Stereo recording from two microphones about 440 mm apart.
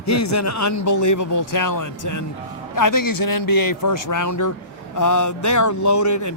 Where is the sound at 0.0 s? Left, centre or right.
Left.